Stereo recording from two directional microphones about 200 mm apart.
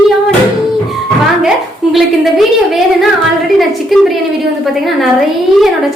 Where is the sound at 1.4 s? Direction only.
Centre (ahead or behind).